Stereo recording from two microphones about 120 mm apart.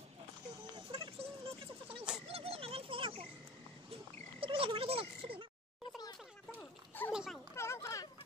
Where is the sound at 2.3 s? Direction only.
55° right (ahead or behind).